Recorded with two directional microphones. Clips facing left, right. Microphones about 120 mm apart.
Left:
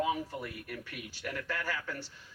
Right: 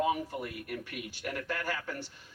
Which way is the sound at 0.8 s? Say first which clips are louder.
Right 2 dB; 50° right (ahead or behind).